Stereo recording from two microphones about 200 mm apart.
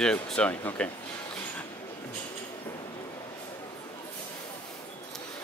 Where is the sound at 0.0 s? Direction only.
5° left (ahead or behind).